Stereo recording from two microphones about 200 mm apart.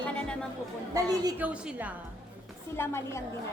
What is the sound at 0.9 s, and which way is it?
Speech, 20° right (ahead or behind).